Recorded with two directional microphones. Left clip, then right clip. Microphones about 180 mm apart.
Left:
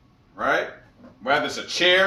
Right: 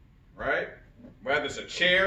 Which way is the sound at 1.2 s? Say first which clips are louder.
Left 6 dB; 5° left (ahead or behind).